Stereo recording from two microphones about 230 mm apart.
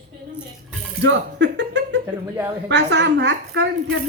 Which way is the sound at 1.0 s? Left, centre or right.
Right.